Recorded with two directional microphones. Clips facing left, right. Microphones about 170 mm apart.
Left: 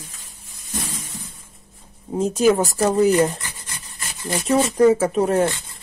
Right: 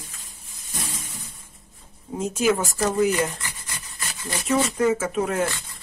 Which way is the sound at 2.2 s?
35° left (ahead or behind).